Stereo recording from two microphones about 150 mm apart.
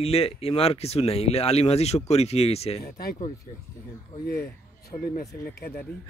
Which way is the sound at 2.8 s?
90° left.